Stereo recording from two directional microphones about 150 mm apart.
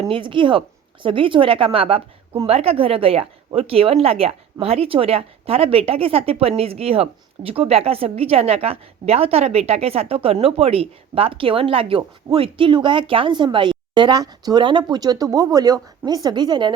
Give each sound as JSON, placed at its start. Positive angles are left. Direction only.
{"t": 0.1, "sound": "speech", "side_deg": -35}